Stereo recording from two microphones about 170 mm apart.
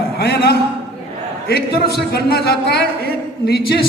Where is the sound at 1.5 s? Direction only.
70° left (ahead or behind).